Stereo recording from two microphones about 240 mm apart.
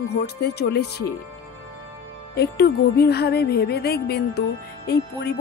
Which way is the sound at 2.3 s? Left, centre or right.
Left.